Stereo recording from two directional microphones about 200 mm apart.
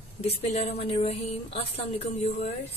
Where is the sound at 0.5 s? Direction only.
30° left (ahead or behind).